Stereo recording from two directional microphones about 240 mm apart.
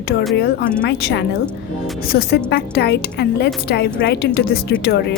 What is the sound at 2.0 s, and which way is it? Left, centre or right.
Speech, left.